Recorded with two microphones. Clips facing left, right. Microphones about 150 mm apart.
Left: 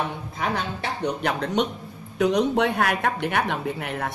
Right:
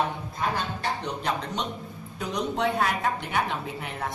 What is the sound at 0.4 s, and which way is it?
Speech, 70° left (ahead or behind).